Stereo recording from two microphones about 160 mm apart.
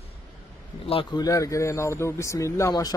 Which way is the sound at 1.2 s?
20° left (ahead or behind).